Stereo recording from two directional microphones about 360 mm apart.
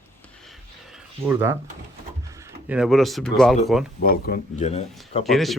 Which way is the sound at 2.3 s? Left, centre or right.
Centre.